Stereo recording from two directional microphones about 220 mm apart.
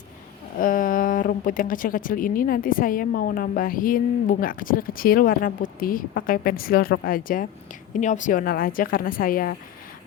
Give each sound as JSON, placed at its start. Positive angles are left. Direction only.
{"t": 0.6, "sound": "speech", "side_deg": 40}